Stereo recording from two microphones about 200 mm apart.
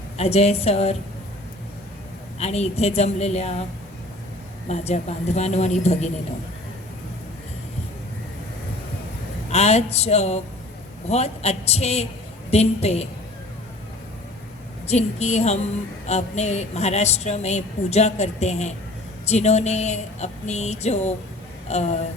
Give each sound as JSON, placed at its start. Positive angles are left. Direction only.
{"t": 0.2, "sound": "speech", "side_deg": 30}
{"t": 2.4, "sound": "speech", "side_deg": 30}
{"t": 4.7, "sound": "speech", "side_deg": 30}
{"t": 9.5, "sound": "speech", "side_deg": 30}
{"t": 14.8, "sound": "speech", "side_deg": 35}